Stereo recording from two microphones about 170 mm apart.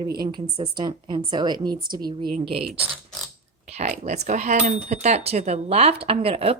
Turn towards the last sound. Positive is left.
turn(degrees=-35)  # may be behind; listen again after turning